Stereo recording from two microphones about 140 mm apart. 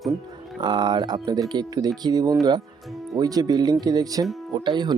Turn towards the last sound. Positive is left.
turn(degrees=-30)  # may be behind; listen again after turning